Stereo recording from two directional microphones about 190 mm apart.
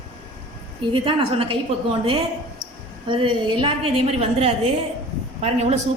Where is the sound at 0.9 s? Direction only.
25° right (ahead or behind).